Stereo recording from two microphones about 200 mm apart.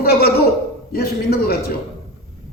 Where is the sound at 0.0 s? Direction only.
50° left (ahead or behind).